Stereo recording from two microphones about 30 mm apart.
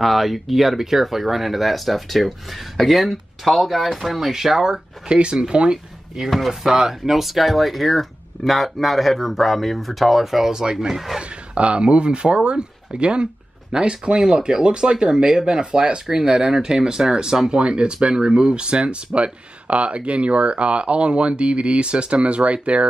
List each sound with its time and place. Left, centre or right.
0.0 s speech: centre
4.3 s speech: centre
5.0 s speech: right
6.3 s speech: centre
6.6 s speech: centre
10.5 s speech: right
11.1 s speech: right
17.6 s speech: right
17.9 s speech: right